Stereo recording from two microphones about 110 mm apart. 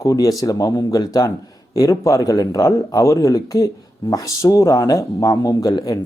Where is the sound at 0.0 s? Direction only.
30° left (ahead or behind).